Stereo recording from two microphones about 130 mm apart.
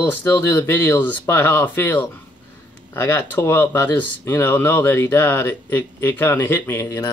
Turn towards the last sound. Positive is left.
turn(degrees=20)  # may be behind; listen again after turning